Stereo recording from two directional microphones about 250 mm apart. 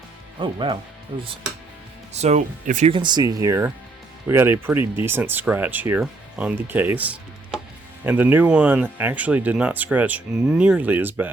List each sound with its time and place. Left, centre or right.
0.3 s speech: centre